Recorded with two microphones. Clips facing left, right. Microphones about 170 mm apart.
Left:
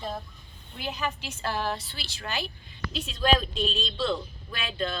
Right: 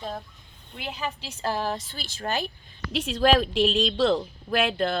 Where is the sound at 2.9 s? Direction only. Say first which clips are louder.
Right 4 dB; 90° right.